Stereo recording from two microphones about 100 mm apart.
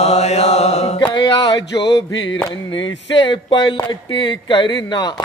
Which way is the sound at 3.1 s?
50° left (ahead or behind).